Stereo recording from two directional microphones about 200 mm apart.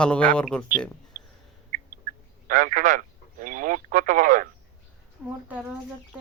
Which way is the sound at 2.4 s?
40° right (ahead or behind).